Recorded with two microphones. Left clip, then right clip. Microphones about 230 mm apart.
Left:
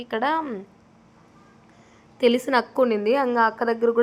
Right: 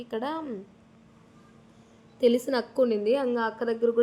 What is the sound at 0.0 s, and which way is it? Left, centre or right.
Speech, centre.